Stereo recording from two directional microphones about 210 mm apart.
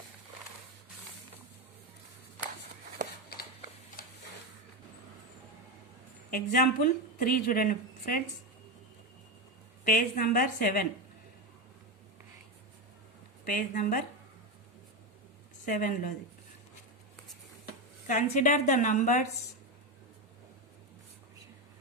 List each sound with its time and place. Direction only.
4.0 s a sound: 40° left (ahead or behind)
6.3 s a woman's voice: 40° left (ahead or behind)
9.8 s a woman's voice: 40° left (ahead or behind)
13.4 s a woman's voice: 40° left (ahead or behind)
15.6 s a woman's voice: 40° left (ahead or behind)
18.1 s a woman's voice: 35° left (ahead or behind)